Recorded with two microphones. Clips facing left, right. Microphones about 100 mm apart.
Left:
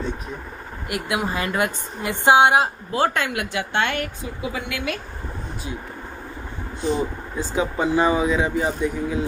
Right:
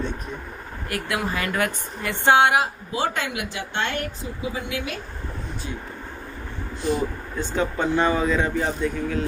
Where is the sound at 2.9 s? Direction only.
55° left (ahead or behind).